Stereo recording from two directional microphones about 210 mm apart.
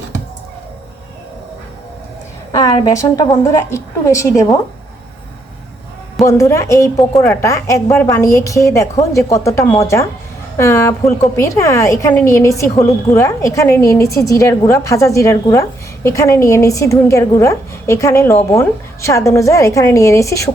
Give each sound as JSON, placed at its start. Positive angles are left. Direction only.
{"t": 2.6, "sound": "a woman's voice", "side_deg": 15}
{"t": 6.2, "sound": "a woman's voice", "side_deg": 15}